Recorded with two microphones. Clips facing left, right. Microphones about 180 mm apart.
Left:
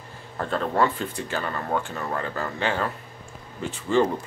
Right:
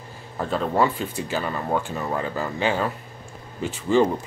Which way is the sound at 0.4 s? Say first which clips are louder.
Right 2 dB; 5° right (ahead or behind).